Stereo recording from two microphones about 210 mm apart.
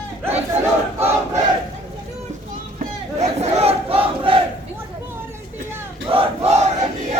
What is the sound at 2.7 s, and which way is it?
Battle cry, 30° right (ahead or behind).